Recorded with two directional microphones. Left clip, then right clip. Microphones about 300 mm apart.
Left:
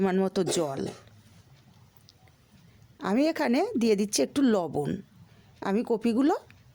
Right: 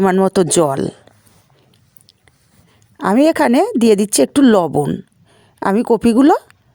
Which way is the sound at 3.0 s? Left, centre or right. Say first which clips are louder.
Right 14 dB; right.